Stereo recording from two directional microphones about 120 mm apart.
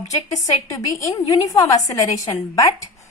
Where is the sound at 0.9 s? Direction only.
30° left (ahead or behind).